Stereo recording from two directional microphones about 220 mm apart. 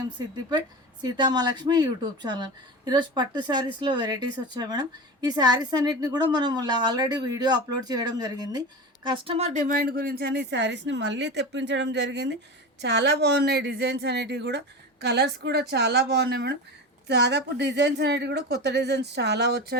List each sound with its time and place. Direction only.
0.2 s speech: 20° right (ahead or behind); by 19.7 s 50° right (ahead or behind)